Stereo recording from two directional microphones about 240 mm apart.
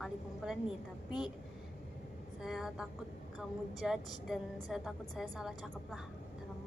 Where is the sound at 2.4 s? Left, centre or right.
Centre.